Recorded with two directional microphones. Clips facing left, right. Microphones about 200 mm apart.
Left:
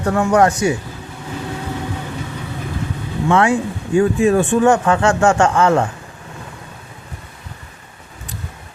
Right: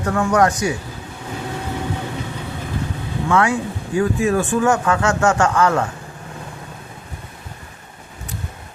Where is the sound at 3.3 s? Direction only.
25° left (ahead or behind).